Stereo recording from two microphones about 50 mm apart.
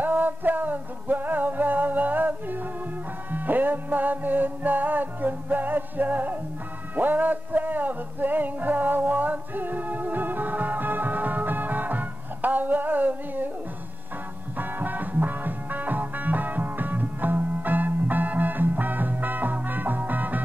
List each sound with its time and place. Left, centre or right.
0.0 s music: right
14.6 s music: right